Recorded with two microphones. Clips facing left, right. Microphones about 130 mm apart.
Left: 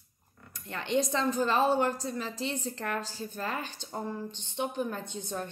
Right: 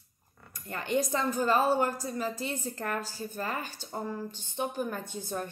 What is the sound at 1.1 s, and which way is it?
A woman's voice, 5° right (ahead or behind).